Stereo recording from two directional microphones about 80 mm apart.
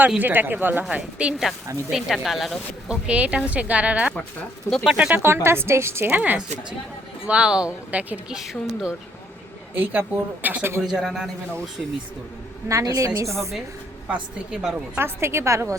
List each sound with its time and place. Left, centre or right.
0.2 s a woman's voice: right
0.9 s speech: centre
3.1 s speech: centre
4.7 s speech: centre
4.9 s speech: centre
5.2 s a woman's voice: right
8.4 s speech: centre
9.7 s a woman's voice: right
10.8 s speech: centre
12.6 s a woman's voice: right
14.5 s speech: centre
14.9 s a woman's voice: right